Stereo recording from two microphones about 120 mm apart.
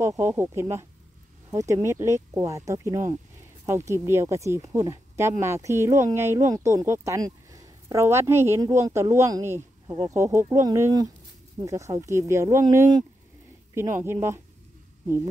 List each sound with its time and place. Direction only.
0.0 s speech: 25° right (ahead or behind)
14.0 s speech: 20° right (ahead or behind)